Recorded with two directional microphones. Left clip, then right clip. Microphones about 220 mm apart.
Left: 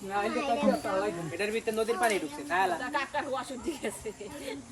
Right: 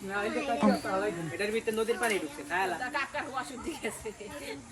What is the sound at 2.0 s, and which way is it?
Speech, 45° left (ahead or behind).